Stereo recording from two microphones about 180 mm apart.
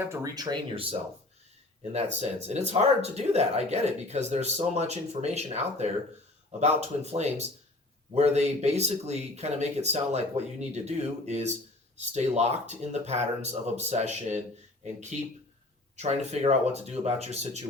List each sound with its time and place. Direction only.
0.0 s speech: 15° right (ahead or behind)
1.9 s speech: 35° right (ahead or behind)
16.0 s speech: 35° right (ahead or behind)